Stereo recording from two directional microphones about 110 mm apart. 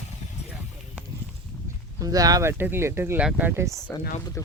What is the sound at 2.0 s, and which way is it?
Speech, 35° right (ahead or behind).